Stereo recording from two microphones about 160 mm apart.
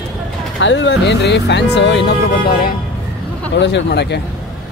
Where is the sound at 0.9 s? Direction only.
90° left; by 2.7 s 70° left (ahead or behind).